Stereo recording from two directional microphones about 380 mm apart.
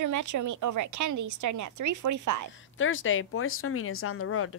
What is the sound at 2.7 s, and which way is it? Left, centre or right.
Speech, left.